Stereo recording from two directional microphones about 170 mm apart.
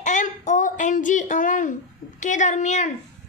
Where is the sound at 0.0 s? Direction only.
45° left (ahead or behind).